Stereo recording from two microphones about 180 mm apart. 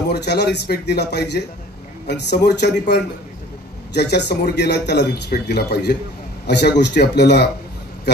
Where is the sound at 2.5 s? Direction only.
70° left (ahead or behind).